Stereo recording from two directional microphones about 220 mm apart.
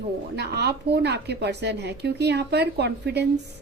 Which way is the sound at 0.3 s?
50° right (ahead or behind).